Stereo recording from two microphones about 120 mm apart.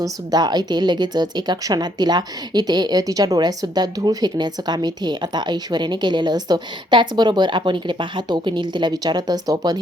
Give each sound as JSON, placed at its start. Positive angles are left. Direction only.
{"t": 0.0, "sound": "speech", "side_deg": -35}